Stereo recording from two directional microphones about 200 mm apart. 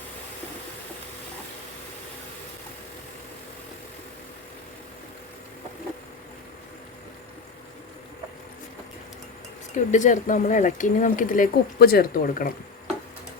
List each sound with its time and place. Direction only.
9.7 s speech: 40° left (ahead or behind)